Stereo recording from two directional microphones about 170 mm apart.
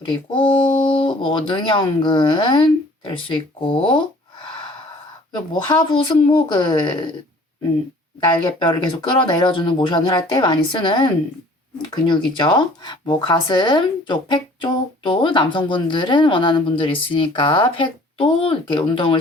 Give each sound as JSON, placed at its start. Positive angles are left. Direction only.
{"t": 0.0, "sound": "speech", "side_deg": 30}
{"t": 5.3, "sound": "speech", "side_deg": 25}
{"t": 8.4, "sound": "speech", "side_deg": 25}